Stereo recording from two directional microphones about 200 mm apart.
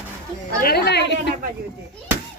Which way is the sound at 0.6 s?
55° left (ahead or behind).